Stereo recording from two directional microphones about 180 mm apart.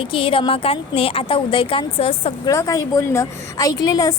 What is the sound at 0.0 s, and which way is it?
A woman's voice, 30° left (ahead or behind).